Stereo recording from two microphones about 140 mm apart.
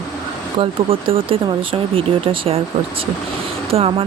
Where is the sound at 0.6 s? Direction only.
40° right (ahead or behind).